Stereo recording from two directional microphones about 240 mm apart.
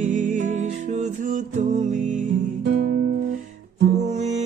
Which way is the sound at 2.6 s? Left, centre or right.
Right.